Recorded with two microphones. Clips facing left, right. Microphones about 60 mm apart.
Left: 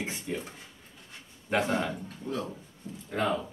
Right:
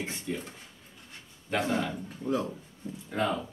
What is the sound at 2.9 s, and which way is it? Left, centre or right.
Speech, right.